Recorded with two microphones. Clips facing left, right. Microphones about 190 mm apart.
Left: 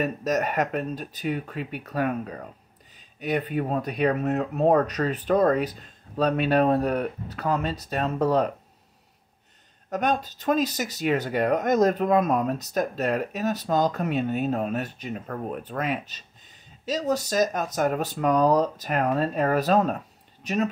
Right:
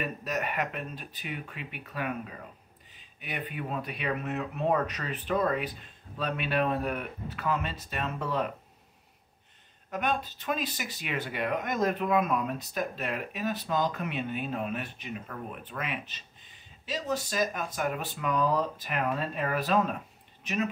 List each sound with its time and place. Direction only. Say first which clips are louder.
0.0 s speech: left 8 dB; 40° left (ahead or behind)
9.8 s speech: left 5 dB; 40° left (ahead or behind)